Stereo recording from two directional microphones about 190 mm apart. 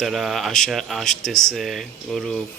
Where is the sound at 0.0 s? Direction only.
Centre (ahead or behind).